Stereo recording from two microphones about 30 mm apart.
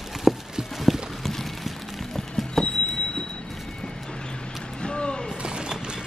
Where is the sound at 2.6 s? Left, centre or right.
Left.